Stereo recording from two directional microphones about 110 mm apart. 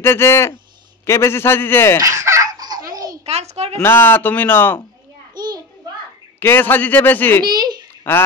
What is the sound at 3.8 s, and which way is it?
Speech, 20° left (ahead or behind).